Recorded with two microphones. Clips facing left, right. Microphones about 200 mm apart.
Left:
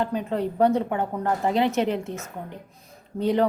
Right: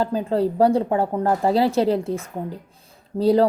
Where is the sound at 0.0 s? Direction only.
30° right (ahead or behind).